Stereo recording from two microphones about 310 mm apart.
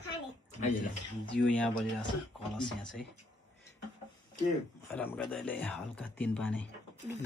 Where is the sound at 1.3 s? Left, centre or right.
Centre.